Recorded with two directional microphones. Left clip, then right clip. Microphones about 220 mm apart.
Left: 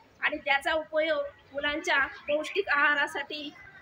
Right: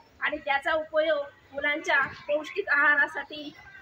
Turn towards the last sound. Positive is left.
turn(degrees=20)  # may be behind; listen again after turning